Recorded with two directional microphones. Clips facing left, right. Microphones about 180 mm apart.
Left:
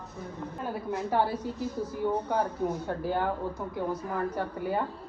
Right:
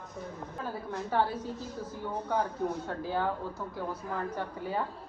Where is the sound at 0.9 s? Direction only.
10° left (ahead or behind).